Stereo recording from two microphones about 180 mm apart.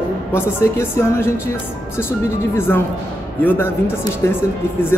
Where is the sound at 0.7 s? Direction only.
15° left (ahead or behind).